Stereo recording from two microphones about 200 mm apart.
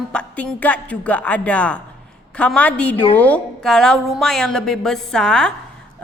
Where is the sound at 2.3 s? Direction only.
5° left (ahead or behind).